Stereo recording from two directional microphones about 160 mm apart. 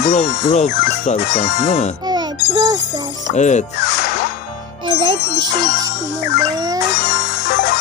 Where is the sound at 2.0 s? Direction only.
25° right (ahead or behind).